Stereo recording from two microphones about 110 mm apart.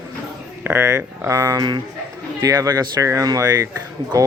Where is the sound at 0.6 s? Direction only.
20° right (ahead or behind).